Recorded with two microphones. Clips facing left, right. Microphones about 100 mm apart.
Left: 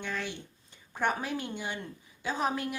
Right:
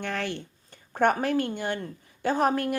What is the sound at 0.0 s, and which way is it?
Speech, 60° right (ahead or behind).